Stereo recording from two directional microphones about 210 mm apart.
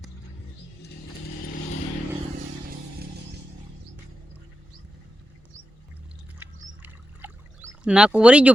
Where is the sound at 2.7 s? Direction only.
50° right (ahead or behind).